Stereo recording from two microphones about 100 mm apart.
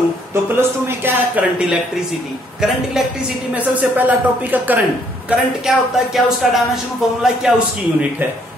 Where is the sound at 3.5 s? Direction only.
15° right (ahead or behind).